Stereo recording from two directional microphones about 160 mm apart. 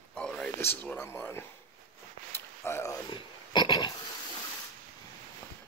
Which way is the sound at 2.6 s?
15° left (ahead or behind).